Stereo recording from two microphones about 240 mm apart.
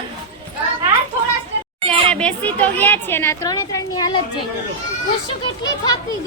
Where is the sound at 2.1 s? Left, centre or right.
Centre.